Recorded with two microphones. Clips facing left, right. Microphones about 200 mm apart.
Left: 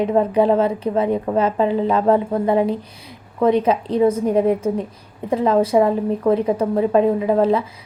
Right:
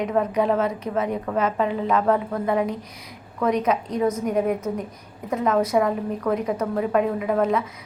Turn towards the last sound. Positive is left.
turn(degrees=30)  # may be behind; listen again after turning